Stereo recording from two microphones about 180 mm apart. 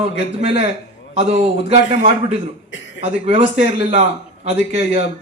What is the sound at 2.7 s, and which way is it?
Throat clearing, 90° left.